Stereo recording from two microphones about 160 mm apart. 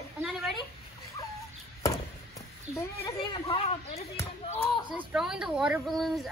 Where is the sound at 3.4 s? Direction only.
40° left (ahead or behind).